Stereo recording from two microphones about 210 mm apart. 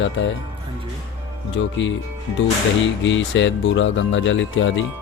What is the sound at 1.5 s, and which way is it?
Speech, 60° left (ahead or behind).